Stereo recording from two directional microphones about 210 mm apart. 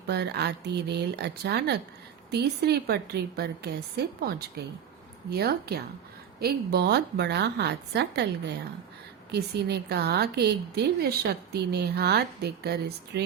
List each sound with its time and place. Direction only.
0.1 s speech: 50° right (ahead or behind)
9.3 s speech: 50° right (ahead or behind)